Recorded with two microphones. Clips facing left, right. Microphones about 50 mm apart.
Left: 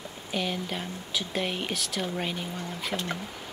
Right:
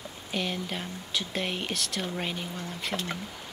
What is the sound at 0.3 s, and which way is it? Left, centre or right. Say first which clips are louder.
Speech: left 1 dB; centre.